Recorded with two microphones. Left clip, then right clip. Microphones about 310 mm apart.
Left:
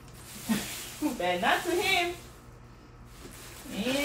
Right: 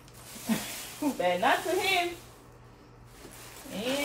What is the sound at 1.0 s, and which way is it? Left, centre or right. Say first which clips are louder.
Speech: right 1 dB; right.